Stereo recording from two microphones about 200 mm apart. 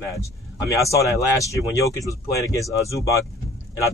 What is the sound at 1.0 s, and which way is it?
Speech, 15° left (ahead or behind).